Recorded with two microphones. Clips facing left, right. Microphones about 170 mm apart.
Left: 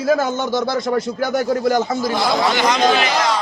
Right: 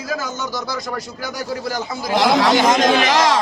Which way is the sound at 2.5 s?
45° right (ahead or behind).